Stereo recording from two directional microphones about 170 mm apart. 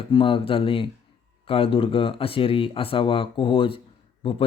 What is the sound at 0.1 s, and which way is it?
Speech, 30° left (ahead or behind).